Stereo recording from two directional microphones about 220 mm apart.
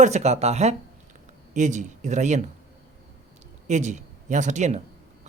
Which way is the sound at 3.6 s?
35° right (ahead or behind).